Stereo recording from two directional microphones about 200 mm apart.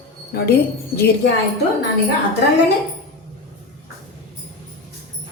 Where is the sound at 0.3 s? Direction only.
50° left (ahead or behind).